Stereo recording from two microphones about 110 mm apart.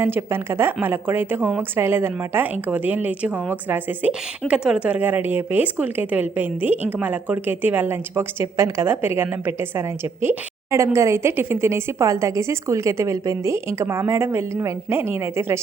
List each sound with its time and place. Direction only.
0.0 s a woman's voice: 20° right (ahead or behind)